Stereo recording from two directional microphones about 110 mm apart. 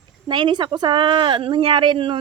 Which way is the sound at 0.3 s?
45° right (ahead or behind).